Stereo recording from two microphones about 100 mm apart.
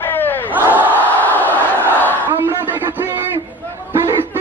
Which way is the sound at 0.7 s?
15° right (ahead or behind).